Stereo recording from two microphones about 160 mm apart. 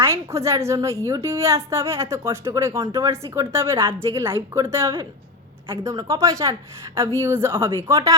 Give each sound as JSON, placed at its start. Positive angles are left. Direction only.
{"t": 0.0, "sound": "a woman's voice", "side_deg": -15}